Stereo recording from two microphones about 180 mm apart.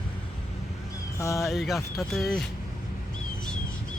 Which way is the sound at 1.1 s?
15° left (ahead or behind).